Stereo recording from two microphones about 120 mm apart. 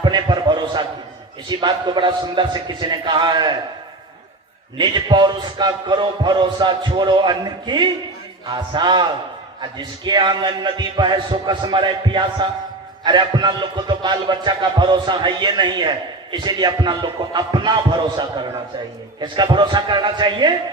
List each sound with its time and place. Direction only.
0.0 s a sound: 40° right (ahead or behind)
1.5 s music: 40° right (ahead or behind)
4.8 s music: 40° right (ahead or behind)